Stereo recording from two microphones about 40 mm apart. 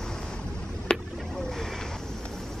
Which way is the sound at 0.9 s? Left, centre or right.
Left.